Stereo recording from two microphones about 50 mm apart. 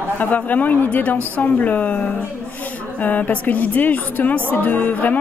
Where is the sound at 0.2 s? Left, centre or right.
Left.